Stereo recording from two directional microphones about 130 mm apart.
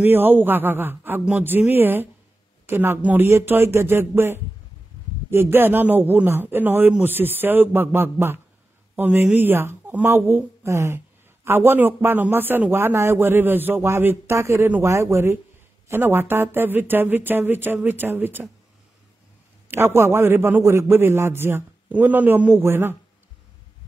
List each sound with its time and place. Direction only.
0.0 s a man's voice: 15° right (ahead or behind)
19.7 s a man's voice: 20° right (ahead or behind)